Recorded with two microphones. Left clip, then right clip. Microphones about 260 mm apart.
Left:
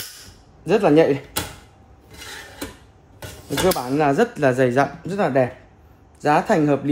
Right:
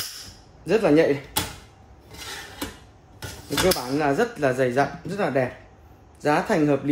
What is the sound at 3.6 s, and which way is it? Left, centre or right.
Speech, left.